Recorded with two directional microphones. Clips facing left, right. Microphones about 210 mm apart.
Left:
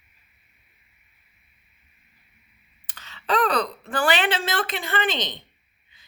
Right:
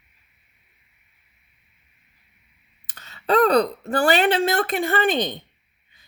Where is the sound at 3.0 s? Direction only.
40° right (ahead or behind).